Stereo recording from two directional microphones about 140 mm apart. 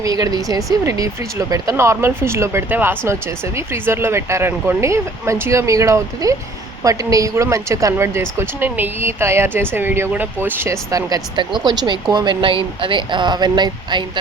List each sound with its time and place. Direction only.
0.0 s speech: 25° right (ahead or behind)